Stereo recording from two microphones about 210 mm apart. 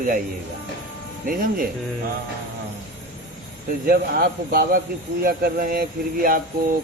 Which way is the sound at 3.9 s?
45° right (ahead or behind).